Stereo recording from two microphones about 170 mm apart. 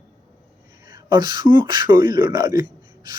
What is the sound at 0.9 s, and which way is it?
Speech, 25° right (ahead or behind).